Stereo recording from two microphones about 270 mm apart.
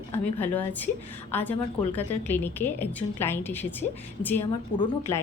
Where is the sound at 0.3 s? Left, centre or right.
Centre.